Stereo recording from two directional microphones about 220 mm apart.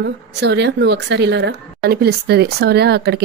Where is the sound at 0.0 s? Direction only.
50° right (ahead or behind).